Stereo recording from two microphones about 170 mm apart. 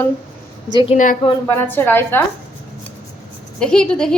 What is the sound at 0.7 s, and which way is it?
Speech, 30° left (ahead or behind).